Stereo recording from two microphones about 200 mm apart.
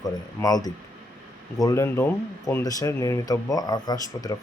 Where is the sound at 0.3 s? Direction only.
20° left (ahead or behind).